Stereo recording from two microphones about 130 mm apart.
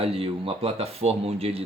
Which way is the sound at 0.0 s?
45° right (ahead or behind).